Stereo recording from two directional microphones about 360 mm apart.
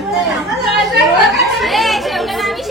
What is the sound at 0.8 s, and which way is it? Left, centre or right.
A woman's voice, centre.